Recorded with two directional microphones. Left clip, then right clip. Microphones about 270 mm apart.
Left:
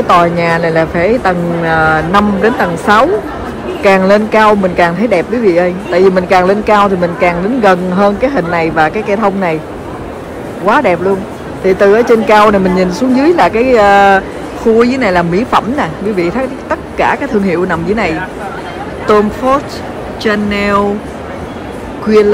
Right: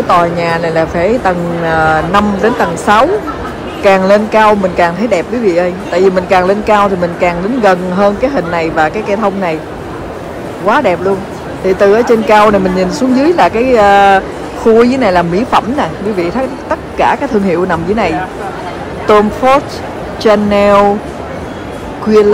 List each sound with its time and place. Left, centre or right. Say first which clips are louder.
0.1 s speech: left 1 dB; centre
3.8 s speech: even; centre
10.6 s speech: left 1 dB; centre
22.0 s speech: even; centre